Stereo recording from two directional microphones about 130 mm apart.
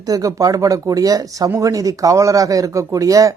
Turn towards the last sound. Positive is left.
turn(degrees=-25)  # may be behind; listen again after turning